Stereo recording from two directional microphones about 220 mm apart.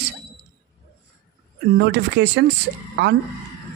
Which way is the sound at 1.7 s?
50° right (ahead or behind).